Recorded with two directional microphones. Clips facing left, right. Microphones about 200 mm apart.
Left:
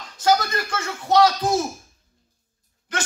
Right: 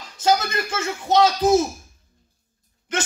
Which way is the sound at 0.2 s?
20° right (ahead or behind).